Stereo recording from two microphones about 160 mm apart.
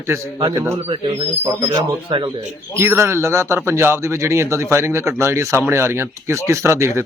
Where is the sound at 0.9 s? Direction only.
30° right (ahead or behind).